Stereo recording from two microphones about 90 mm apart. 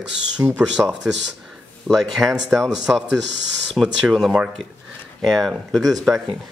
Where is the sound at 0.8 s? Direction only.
15° right (ahead or behind).